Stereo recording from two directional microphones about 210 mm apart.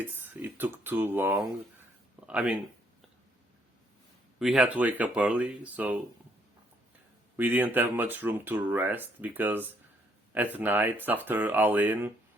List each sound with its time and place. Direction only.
0.0 s speech: 10° right (ahead or behind)
4.4 s speech: 5° right (ahead or behind)
7.3 s speech: 10° right (ahead or behind)